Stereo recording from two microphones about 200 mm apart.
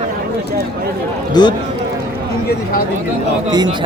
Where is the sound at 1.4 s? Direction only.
20° left (ahead or behind).